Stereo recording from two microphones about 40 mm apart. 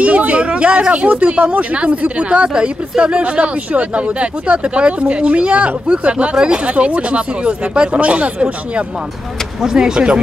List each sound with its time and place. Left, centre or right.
0.0 s a sound: right
0.8 s speech: right
9.6 s speech: centre